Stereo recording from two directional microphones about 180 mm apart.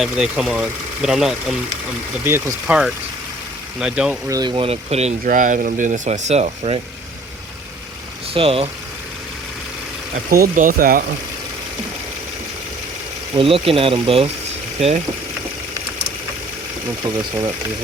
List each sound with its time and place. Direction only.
0.0 s speech: centre (ahead or behind)
4.3 s speech: 25° right (ahead or behind)
5.2 s speech: 50° right (ahead or behind)
8.3 s speech: 30° right (ahead or behind)
10.2 s speech: 55° right (ahead or behind)
13.3 s speech: 30° right (ahead or behind)
17.0 s speech: 20° right (ahead or behind)